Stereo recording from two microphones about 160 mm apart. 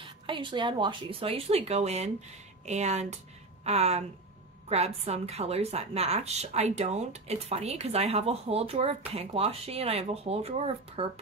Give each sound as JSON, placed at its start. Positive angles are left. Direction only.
{"t": 0.3, "sound": "a woman's voice", "side_deg": -30}